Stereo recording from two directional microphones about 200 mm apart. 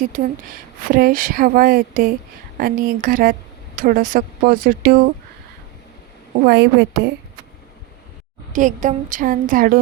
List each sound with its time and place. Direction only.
0.0 s speech: 40° right (ahead or behind)
6.4 s speech: 50° right (ahead or behind)
8.5 s a woman's voice: 40° right (ahead or behind)